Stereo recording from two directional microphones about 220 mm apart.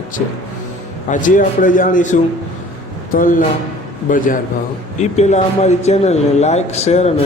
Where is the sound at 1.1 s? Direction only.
35° left (ahead or behind).